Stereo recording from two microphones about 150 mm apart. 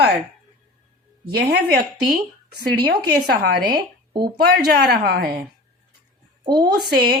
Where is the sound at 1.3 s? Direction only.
90° right.